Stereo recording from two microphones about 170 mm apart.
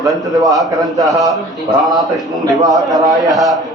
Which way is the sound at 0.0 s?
Centre (ahead or behind).